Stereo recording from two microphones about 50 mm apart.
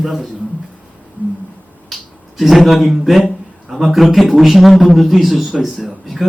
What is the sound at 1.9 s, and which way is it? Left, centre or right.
Speech, centre.